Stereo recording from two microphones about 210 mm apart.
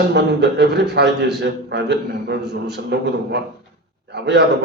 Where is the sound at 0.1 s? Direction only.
55° right (ahead or behind).